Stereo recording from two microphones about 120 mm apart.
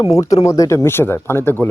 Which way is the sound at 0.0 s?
30° left (ahead or behind).